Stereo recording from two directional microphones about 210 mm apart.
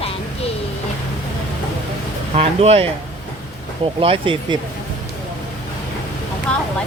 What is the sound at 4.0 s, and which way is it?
Speech, 25° right (ahead or behind).